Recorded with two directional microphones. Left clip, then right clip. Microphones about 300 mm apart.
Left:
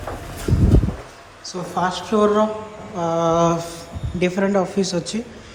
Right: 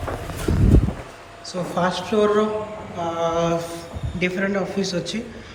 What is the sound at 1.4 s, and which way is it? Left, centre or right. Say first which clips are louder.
A man's voice: even; centre.